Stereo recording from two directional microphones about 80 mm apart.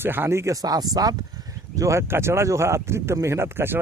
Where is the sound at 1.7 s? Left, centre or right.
Right.